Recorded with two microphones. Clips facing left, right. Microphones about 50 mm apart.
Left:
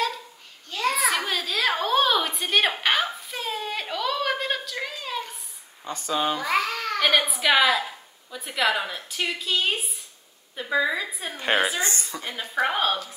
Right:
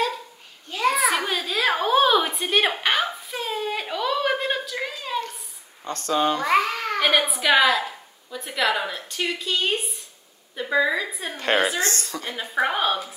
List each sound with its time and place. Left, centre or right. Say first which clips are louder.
0.7 s a sound: right 3 dB; centre
5.9 s a woman's voice: right 3 dB; centre
6.6 s babbling: right 2 dB; centre
7.0 s a woman's voice: right 1 dB; centre